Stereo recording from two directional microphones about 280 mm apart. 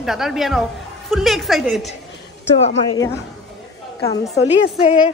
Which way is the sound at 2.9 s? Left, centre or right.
Centre.